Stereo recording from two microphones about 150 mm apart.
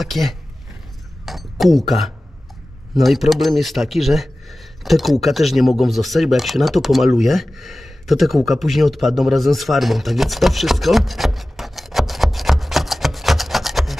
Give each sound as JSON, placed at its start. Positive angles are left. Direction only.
{"t": 0.0, "sound": "speech", "side_deg": 0}
{"t": 1.2, "sound": "a sound", "side_deg": 0}
{"t": 2.9, "sound": "speech", "side_deg": 0}